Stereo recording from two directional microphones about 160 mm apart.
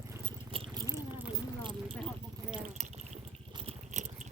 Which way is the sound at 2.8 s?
45° right (ahead or behind).